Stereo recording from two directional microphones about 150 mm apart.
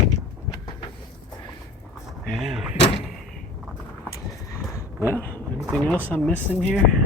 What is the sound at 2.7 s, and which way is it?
Door, 40° left (ahead or behind).